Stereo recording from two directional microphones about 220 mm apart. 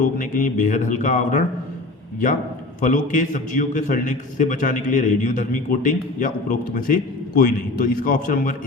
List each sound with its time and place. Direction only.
0.0 s a man's voice: 35° left (ahead or behind)
2.8 s a man's voice: 35° left (ahead or behind)